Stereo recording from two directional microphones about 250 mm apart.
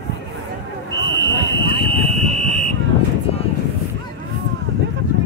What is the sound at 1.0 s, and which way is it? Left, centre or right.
Fire alarm, centre.